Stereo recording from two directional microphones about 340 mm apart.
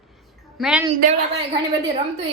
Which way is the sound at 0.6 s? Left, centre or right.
Centre.